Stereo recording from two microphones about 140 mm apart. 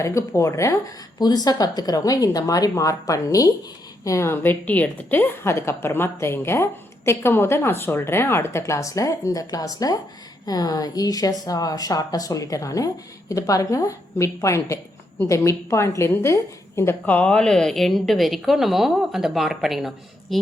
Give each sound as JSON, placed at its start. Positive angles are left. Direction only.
{"t": 0.0, "sound": "a woman's voice", "side_deg": 20}